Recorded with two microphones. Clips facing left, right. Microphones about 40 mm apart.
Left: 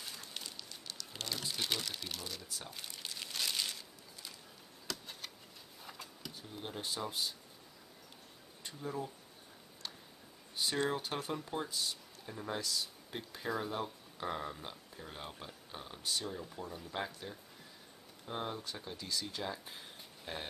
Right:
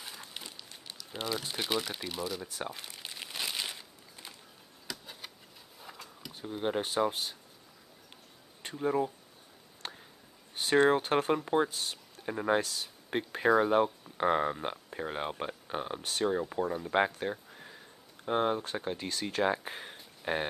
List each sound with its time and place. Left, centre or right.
0.0 s crumpling: centre
1.4 s speech: right
2.0 s speech: centre
2.4 s speech: right
2.9 s crumpling: right
4.8 s a sound: centre
6.3 s speech: right
8.6 s speech: right
9.8 s tick-tock: right
10.5 s speech: right